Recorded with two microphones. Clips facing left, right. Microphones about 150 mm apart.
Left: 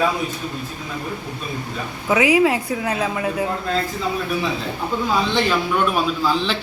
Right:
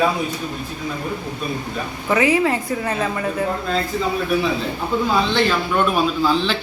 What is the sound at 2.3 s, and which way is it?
A woman's voice, 10° left (ahead or behind).